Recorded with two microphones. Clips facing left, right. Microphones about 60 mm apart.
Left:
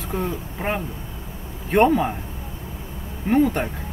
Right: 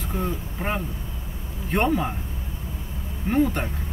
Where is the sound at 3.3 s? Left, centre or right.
Centre.